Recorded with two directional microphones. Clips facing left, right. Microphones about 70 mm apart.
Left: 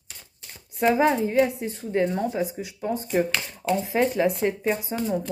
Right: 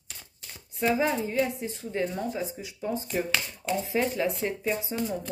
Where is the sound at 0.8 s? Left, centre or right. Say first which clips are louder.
Left 5 dB; left.